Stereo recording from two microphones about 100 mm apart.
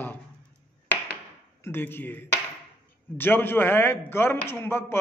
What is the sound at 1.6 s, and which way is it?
A man's voice, 25° left (ahead or behind).